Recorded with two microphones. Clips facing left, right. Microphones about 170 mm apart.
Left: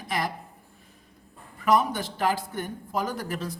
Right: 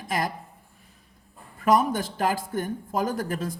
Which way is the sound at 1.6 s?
45° right (ahead or behind).